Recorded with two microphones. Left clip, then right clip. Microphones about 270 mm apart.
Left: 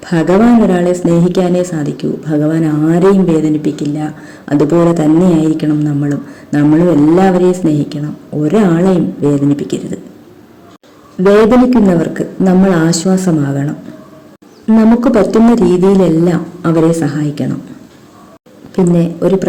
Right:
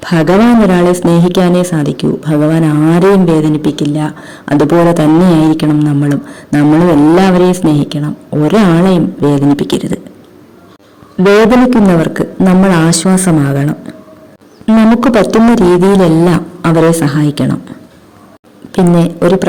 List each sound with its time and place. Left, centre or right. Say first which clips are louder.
0.0 s speech: right 2 dB; right
11.3 s speech: even; right
14.8 s speech: right 1 dB; right
18.9 s speech: right 3 dB; right